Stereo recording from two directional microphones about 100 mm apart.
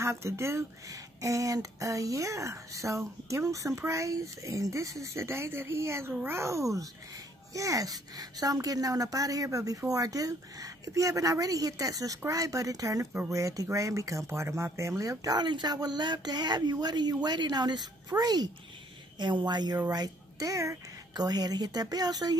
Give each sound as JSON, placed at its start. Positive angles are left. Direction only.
{"t": 0.0, "sound": "speech", "side_deg": -30}